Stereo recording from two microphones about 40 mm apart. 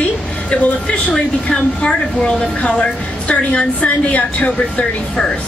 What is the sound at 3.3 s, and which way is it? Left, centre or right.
A woman's voice, left.